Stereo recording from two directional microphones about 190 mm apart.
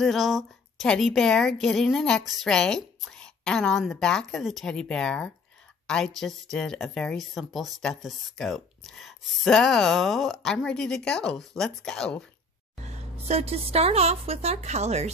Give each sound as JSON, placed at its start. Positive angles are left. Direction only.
{"t": 0.0, "sound": "a woman's voice", "side_deg": 0}
{"t": 12.8, "sound": "a woman's voice", "side_deg": -35}